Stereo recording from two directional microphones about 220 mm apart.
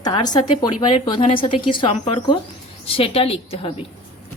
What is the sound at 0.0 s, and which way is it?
Speech, 20° left (ahead or behind).